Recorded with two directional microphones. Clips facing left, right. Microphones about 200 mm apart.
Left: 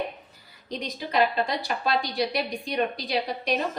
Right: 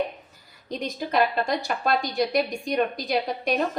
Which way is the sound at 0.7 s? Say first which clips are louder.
Right 3 dB; 50° right (ahead or behind).